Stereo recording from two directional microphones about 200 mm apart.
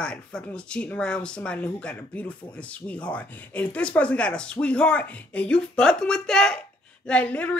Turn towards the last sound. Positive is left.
turn(degrees=5)  # may be behind; listen again after turning